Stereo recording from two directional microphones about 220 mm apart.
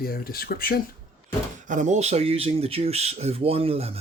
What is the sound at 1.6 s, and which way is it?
Speech, 35° right (ahead or behind).